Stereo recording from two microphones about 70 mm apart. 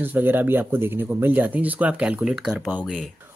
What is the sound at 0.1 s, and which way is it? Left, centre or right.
Speech, right.